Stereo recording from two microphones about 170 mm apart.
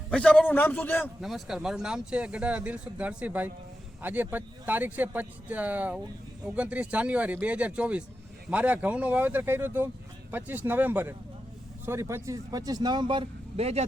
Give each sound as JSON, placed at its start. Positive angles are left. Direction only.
{"t": 0.1, "sound": "a man's voice", "side_deg": 5}
{"t": 1.2, "sound": "speech", "side_deg": -5}